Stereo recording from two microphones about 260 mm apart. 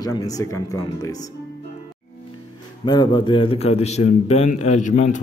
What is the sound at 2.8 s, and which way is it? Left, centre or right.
A man's voice, centre.